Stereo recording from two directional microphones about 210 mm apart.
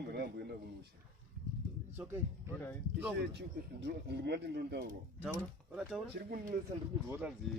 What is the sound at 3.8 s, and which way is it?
Speech, 55° right (ahead or behind).